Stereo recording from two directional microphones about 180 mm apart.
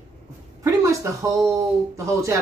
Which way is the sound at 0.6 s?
15° right (ahead or behind).